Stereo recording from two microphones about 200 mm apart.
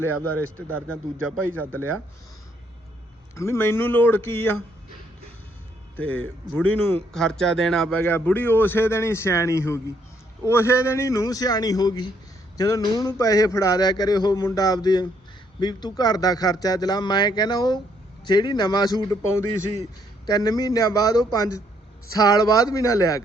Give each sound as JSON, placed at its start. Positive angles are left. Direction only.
{"t": 0.3, "sound": "a man's voice", "side_deg": -90}
{"t": 3.3, "sound": "speech", "side_deg": 15}
{"t": 6.0, "sound": "a man's voice", "side_deg": 5}